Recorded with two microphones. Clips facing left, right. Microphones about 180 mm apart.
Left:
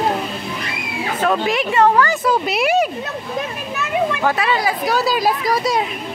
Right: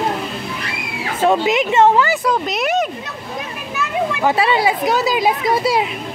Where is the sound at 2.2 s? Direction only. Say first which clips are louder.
Left 1 dB; 5° left (ahead or behind).